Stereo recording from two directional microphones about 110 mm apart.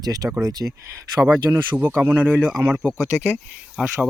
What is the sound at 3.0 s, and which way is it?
Speech, 25° left (ahead or behind).